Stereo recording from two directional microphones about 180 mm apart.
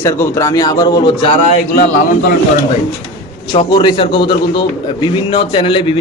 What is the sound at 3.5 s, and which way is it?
A man's voice, 25° left (ahead or behind).